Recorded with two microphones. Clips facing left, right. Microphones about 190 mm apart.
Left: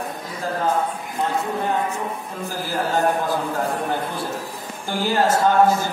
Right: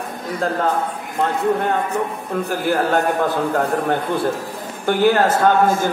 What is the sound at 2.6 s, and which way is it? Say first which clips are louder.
Speech: right 2 dB; 60° right (ahead or behind).